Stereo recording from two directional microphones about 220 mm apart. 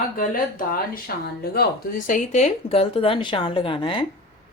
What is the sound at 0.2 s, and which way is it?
Speech, 40° left (ahead or behind).